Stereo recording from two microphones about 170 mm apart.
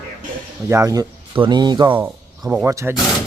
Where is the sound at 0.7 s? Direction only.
20° right (ahead or behind).